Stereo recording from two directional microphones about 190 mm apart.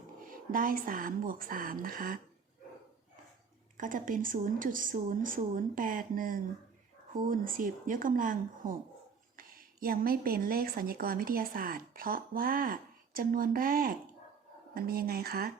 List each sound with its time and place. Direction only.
0.3 s speech: 45° right (ahead or behind)
3.8 s a woman's voice: 45° right (ahead or behind)